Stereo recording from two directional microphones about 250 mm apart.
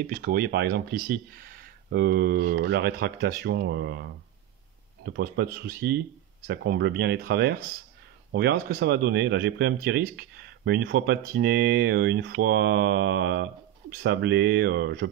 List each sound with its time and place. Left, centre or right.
0.0 s speech: right